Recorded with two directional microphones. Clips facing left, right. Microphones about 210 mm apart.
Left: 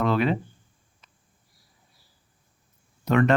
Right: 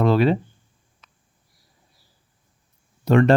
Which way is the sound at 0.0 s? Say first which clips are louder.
Right 5 dB; 35° right (ahead or behind).